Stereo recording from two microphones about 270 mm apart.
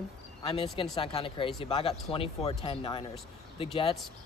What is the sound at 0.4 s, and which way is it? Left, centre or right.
Speech, centre.